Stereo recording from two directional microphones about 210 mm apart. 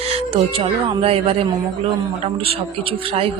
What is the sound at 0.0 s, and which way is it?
Speech, 30° right (ahead or behind).